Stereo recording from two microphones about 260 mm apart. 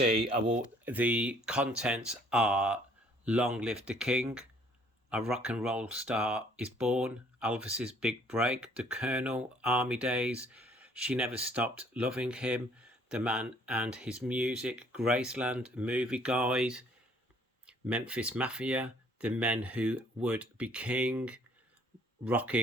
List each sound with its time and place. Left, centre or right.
0.9 s speech: centre